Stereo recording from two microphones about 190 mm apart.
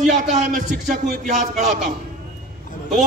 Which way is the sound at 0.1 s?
40° right (ahead or behind).